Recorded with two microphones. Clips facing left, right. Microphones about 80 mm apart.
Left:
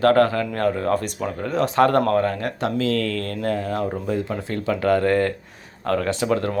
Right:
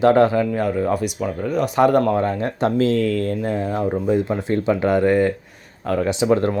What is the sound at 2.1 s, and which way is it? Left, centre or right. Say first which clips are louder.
Speech: right 1 dB; right.